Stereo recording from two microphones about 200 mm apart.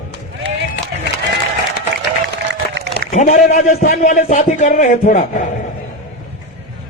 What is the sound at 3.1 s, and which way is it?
Speech, 35° left (ahead or behind).